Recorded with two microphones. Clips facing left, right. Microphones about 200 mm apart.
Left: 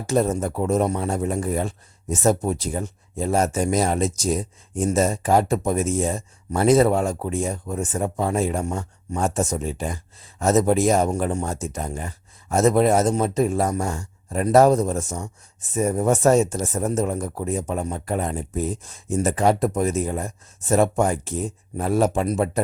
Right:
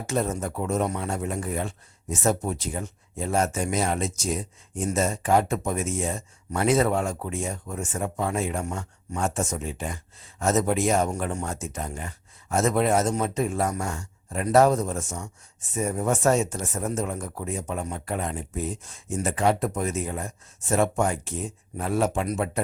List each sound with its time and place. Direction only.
0.1 s a man's voice: 35° left (ahead or behind)